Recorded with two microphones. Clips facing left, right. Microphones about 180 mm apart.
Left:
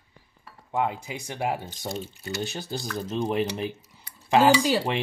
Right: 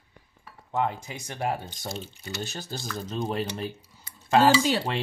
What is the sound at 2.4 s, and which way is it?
Speech, 15° left (ahead or behind).